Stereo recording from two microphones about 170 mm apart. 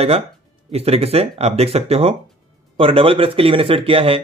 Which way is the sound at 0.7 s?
35° right (ahead or behind).